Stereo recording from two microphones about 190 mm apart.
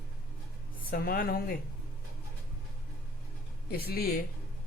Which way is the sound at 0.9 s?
50° left (ahead or behind).